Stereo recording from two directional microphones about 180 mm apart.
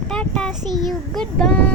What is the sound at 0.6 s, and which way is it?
Speech, 20° right (ahead or behind).